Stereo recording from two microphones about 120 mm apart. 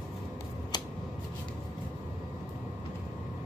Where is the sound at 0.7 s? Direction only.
35° left (ahead or behind).